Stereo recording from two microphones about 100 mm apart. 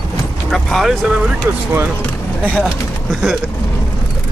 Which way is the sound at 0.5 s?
Centre (ahead or behind).